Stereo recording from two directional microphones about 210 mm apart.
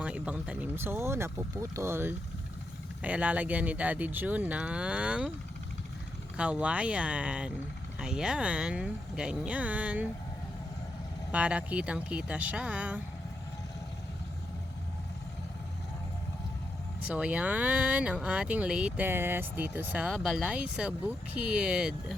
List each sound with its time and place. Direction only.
0.0 s speech: 5° right (ahead or behind)
6.3 s speech: 5° right (ahead or behind)
11.3 s speech: 5° right (ahead or behind)
17.1 s speech: 5° right (ahead or behind)